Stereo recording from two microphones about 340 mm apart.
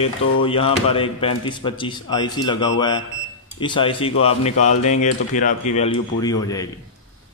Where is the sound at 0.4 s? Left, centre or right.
Centre.